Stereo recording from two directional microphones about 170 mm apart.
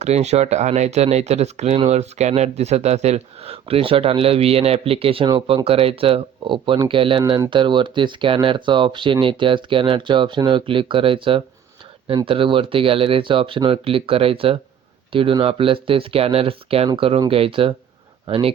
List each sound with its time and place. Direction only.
0.0 s speech: 40° right (ahead or behind)